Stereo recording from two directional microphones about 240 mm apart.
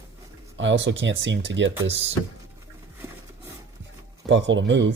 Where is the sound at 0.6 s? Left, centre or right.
Right.